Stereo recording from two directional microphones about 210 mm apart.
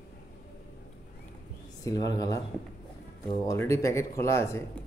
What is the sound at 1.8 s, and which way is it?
Speech, 20° left (ahead or behind).